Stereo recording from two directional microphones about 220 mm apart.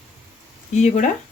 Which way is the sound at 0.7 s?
30° left (ahead or behind).